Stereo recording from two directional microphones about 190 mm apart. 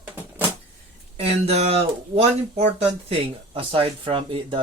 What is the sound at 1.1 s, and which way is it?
Speech, 30° right (ahead or behind).